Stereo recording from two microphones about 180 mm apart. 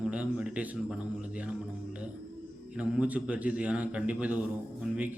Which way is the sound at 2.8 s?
5° right (ahead or behind).